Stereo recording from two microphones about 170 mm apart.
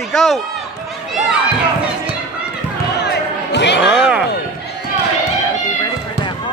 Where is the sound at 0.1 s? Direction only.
Centre (ahead or behind).